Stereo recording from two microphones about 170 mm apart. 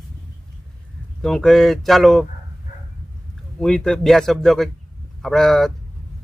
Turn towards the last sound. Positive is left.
turn(degrees=5)  # may be behind; listen again after turning